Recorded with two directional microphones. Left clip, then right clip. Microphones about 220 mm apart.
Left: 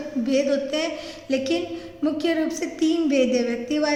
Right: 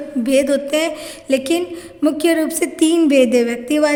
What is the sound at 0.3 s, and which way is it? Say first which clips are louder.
Speech: right 7 dB; 50° right (ahead or behind).